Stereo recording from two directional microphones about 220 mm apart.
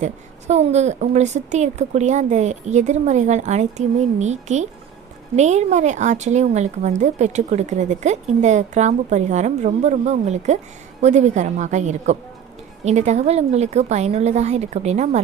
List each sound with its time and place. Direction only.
0.0 s a woman's voice: 30° right (ahead or behind)